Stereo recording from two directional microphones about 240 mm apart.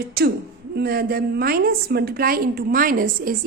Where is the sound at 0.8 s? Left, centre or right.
Right.